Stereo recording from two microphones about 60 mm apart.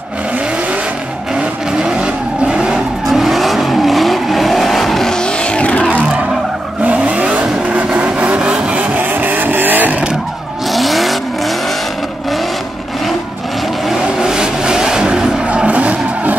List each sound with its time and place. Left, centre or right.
1.3 s vehicle: centre; by 5.9 s left
5.9 s vehicle: right
10.7 s vehicle: centre
13.8 s vehicle: centre